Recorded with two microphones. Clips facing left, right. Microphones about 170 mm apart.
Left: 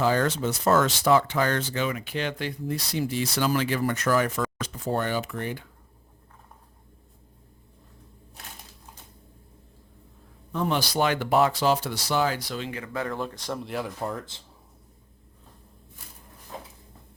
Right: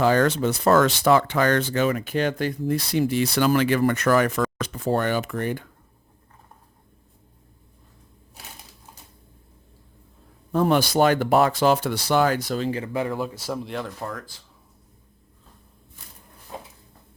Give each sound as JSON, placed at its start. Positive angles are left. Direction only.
{"t": 0.0, "sound": "speech", "side_deg": -65}
{"t": 10.5, "sound": "speech", "side_deg": -45}
{"t": 12.9, "sound": "speech", "side_deg": -10}
{"t": 13.8, "sound": "speech", "side_deg": 20}